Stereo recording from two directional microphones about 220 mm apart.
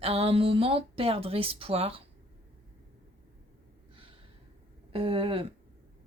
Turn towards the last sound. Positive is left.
turn(degrees=-25)  # may be behind; listen again after turning